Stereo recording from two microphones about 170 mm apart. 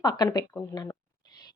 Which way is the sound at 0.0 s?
25° left (ahead or behind).